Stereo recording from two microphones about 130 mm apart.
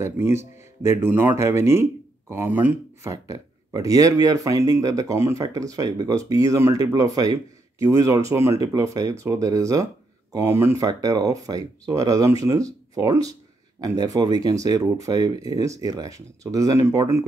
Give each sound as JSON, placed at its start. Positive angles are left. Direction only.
{"t": 0.0, "sound": "speech", "side_deg": -20}
{"t": 3.1, "sound": "speech", "side_deg": -25}